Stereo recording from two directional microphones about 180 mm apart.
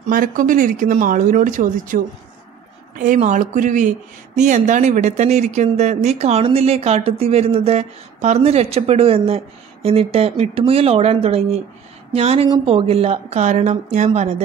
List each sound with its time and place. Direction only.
0.1 s speech: 50° right (ahead or behind)
3.0 s speech: 45° right (ahead or behind)